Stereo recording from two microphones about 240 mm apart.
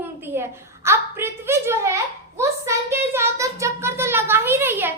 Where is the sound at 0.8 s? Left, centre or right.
Centre.